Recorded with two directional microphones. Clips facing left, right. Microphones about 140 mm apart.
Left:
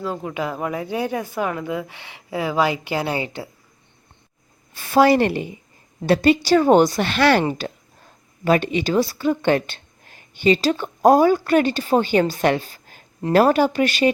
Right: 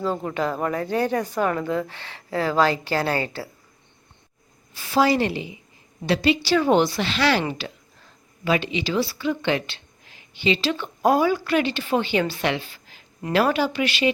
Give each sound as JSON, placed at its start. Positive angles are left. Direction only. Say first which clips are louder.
{"t": 0.0, "sound": "speech", "louder": "right 1 dB", "side_deg": 5}
{"t": 4.7, "sound": "a woman's voice", "louder": "left 5 dB", "side_deg": 55}